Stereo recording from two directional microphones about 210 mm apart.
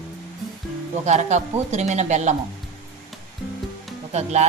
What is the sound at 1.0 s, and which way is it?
A woman's voice, 35° right (ahead or behind).